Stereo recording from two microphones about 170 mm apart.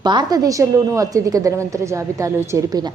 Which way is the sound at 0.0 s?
25° right (ahead or behind).